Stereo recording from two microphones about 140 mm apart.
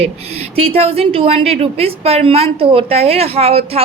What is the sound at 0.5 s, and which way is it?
A woman's voice, 45° right (ahead or behind).